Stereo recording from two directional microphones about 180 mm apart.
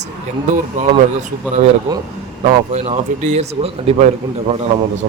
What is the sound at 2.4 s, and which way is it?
A man's voice, 35° right (ahead or behind).